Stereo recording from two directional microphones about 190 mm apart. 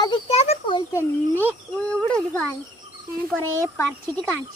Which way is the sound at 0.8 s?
10° left (ahead or behind).